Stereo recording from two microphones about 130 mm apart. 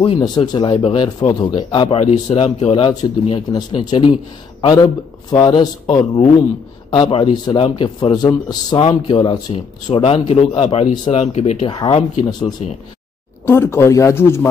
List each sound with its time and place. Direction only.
0.2 s a man's voice: 35° left (ahead or behind)
6.9 s a man's voice: 40° left (ahead or behind); by 11.5 s 55° left (ahead or behind)
11.6 s a man's voice: 40° left (ahead or behind)
13.5 s speech: 20° left (ahead or behind)